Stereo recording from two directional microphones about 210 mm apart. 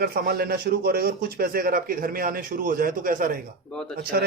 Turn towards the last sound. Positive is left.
turn(degrees=-50)  # may be behind; listen again after turning